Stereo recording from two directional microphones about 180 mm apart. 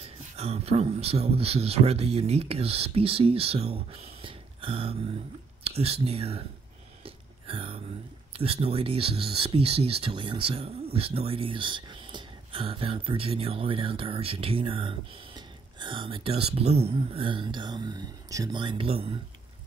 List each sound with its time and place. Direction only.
0.4 s speech: 35° right (ahead or behind)
7.0 s a sound: 30° right (ahead or behind)
8.3 s speech: 30° right (ahead or behind)